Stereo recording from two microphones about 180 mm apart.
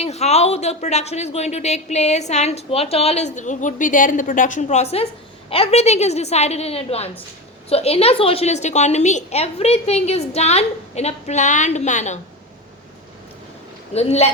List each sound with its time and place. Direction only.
0.0 s speech: 35° left (ahead or behind)
13.9 s speech: 35° left (ahead or behind)